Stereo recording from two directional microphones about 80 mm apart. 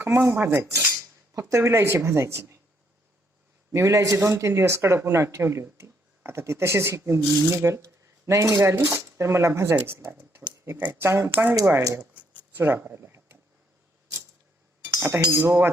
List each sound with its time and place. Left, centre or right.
0.0 s speech: right
3.7 s speech: right
11.3 s speech: right
12.5 s a sound: right
14.8 s chink: right
15.4 s speech: right